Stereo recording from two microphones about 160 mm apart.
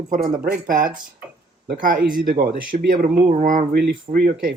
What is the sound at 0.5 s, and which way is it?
Speech, 60° right (ahead or behind).